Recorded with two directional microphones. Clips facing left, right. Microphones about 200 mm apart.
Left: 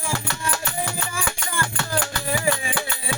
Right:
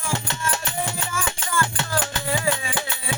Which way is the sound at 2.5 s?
20° right (ahead or behind).